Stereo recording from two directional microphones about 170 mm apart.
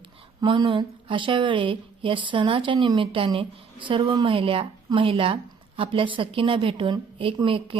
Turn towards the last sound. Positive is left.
turn(degrees=-30)  # may be behind; listen again after turning